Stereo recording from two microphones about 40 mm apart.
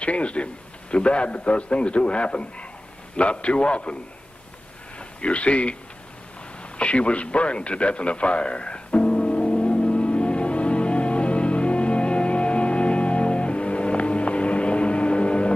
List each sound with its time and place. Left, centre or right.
0.0 s a man's voice: left
4.9 s speech: left
6.6 s a sound: left